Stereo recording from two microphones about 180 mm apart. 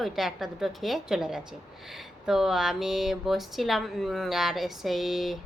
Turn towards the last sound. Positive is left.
turn(degrees=0)  # may be behind; listen again after turning